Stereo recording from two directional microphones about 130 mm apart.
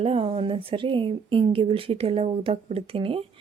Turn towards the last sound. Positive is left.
turn(degrees=-45)  # may be behind; listen again after turning